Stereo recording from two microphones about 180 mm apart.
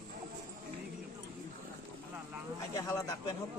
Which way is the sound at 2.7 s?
20° left (ahead or behind).